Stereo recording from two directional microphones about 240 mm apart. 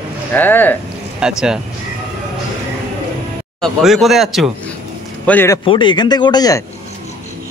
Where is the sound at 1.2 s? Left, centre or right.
Centre.